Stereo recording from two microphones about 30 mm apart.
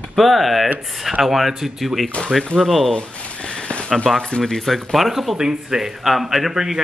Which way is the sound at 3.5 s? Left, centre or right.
Left.